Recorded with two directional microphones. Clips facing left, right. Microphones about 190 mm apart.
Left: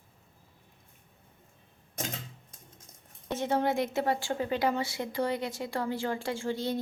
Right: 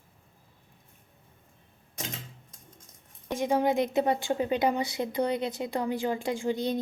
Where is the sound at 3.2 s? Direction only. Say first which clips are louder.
Right 3 dB; 15° right (ahead or behind).